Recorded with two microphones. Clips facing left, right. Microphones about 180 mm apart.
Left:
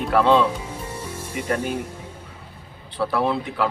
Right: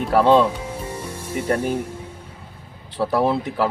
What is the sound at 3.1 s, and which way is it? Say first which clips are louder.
Speech: right 4 dB; 40° right (ahead or behind).